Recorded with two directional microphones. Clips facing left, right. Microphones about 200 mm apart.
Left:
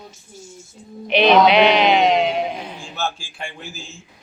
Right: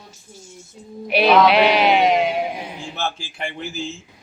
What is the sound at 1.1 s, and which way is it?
Bleat, 5° right (ahead or behind).